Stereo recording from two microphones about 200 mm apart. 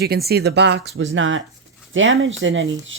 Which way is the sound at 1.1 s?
75° right (ahead or behind).